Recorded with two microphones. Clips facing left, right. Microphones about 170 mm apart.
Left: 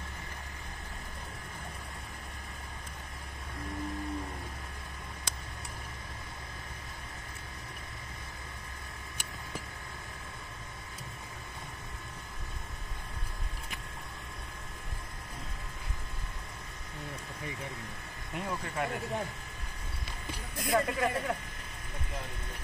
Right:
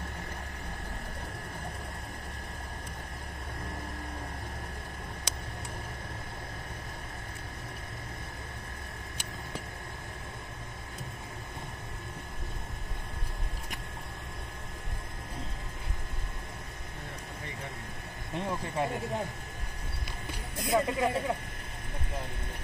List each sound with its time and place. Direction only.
18.3 s speech: 25° right (ahead or behind)
20.6 s speech: 20° right (ahead or behind)